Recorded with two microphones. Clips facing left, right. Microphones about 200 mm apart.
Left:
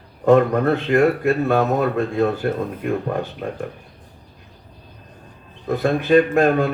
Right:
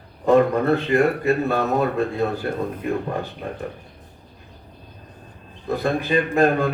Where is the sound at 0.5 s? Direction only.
55° left (ahead or behind).